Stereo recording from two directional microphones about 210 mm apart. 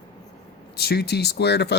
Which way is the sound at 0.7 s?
50° left (ahead or behind).